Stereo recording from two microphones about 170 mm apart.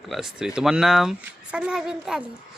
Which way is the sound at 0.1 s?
Centre (ahead or behind).